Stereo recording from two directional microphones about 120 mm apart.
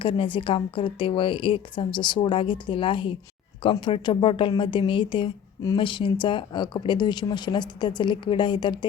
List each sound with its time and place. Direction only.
0.0 s a woman's voice: 45° left (ahead or behind)